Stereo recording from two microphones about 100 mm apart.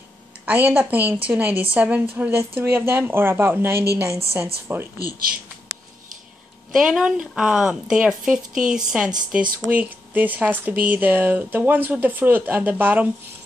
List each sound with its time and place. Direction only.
0.5 s a woman's voice: 20° right (ahead or behind)
6.7 s speech: 5° right (ahead or behind)